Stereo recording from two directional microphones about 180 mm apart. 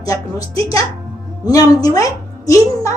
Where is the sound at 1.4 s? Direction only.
20° left (ahead or behind).